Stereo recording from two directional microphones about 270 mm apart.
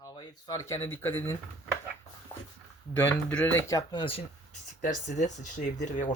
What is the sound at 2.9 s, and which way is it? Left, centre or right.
Speech, centre.